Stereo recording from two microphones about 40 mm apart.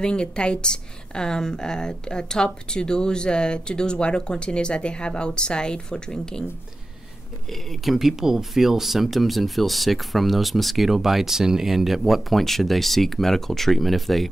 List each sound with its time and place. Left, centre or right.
0.0 s a woman's voice: left
7.4 s speech: centre
7.9 s speech: centre